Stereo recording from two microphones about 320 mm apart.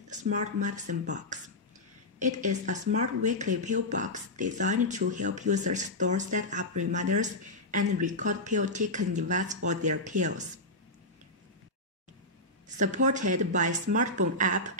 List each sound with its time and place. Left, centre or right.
0.1 s speech: right
12.7 s speech: right